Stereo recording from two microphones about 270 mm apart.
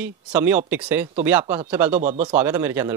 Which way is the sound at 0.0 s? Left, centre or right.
Centre.